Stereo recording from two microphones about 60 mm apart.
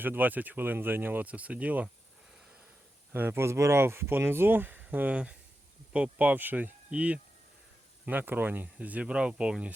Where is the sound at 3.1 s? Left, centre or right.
Right.